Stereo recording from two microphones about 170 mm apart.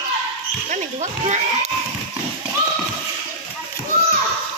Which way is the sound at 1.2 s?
40° right (ahead or behind).